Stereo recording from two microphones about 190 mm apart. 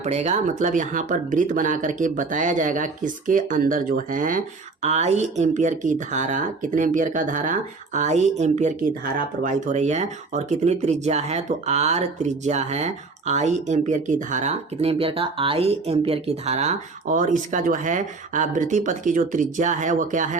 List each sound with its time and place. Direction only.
0.0 s speech: 35° right (ahead or behind)